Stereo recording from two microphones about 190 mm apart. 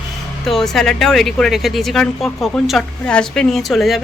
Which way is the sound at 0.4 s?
Centre (ahead or behind).